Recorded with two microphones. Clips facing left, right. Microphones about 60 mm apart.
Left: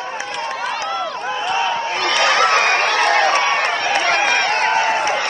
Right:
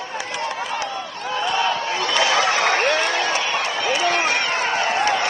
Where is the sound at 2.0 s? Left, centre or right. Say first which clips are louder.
Left 4 dB; left.